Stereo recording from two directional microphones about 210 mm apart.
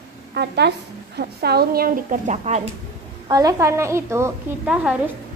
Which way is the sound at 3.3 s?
15° right (ahead or behind).